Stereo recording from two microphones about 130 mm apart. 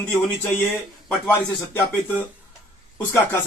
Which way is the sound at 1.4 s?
15° left (ahead or behind).